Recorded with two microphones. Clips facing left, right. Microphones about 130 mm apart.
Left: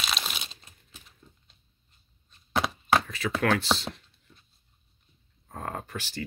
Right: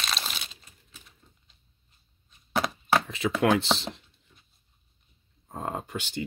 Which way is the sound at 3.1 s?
20° right (ahead or behind).